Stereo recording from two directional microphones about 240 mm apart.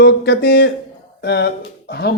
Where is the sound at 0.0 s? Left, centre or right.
Left.